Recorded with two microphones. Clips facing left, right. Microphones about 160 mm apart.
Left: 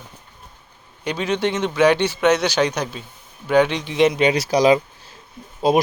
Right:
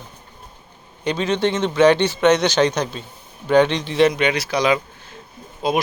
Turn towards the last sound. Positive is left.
turn(degrees=40)  # may be behind; listen again after turning